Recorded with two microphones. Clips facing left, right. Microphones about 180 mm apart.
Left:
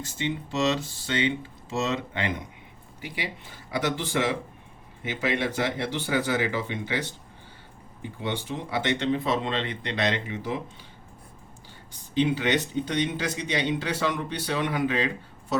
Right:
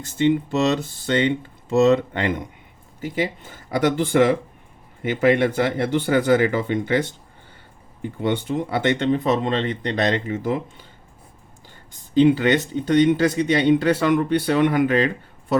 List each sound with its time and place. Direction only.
1.0 s speech: 50° right (ahead or behind)
12.4 s speech: 50° right (ahead or behind)